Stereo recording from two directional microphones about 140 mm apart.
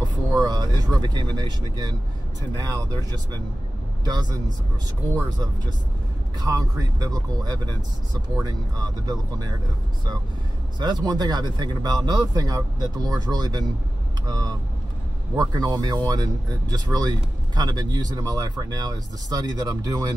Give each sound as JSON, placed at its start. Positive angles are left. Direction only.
{"t": 0.0, "sound": "speech", "side_deg": -30}
{"t": 4.0, "sound": "speech", "side_deg": -30}
{"t": 6.4, "sound": "speech", "side_deg": -25}
{"t": 10.8, "sound": "speech", "side_deg": -30}